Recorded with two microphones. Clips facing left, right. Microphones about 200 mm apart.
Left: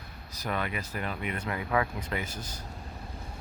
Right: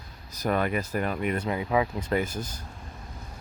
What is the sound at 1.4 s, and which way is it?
Speech, 25° right (ahead or behind).